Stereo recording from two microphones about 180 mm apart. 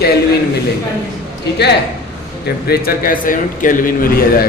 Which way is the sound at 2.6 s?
60° left (ahead or behind).